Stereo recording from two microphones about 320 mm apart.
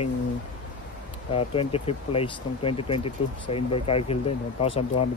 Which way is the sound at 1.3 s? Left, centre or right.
Centre.